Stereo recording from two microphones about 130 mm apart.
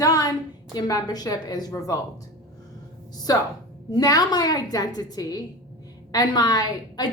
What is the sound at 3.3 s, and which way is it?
A woman's voice, 30° left (ahead or behind).